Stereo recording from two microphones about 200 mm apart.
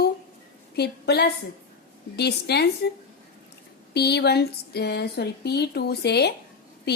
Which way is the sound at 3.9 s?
55° left (ahead or behind).